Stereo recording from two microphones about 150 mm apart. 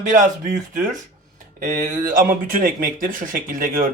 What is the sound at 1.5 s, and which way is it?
Speech, 65° right (ahead or behind).